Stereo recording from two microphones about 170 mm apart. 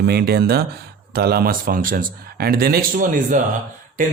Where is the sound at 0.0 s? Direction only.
70° right (ahead or behind).